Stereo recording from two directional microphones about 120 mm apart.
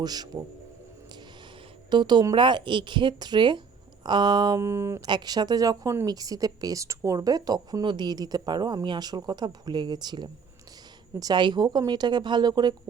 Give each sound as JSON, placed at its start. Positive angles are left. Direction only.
{"t": 0.0, "sound": "speech", "side_deg": -35}
{"t": 1.9, "sound": "speech", "side_deg": -40}
{"t": 4.6, "sound": "speech", "side_deg": -25}
{"t": 5.0, "sound": "speech", "side_deg": -35}